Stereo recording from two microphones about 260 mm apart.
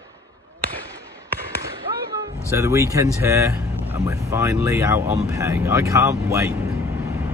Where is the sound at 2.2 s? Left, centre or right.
Centre.